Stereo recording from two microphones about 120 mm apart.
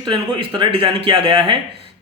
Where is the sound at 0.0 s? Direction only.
40° right (ahead or behind).